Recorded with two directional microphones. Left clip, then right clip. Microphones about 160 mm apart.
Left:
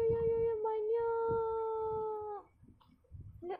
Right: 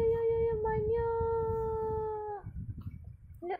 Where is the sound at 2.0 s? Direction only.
10° right (ahead or behind).